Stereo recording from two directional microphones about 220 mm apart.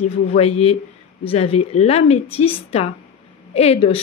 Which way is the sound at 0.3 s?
30° left (ahead or behind).